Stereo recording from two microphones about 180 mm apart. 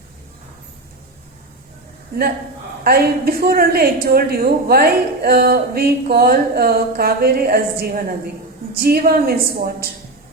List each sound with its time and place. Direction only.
2.1 s a man's voice: 55° right (ahead or behind)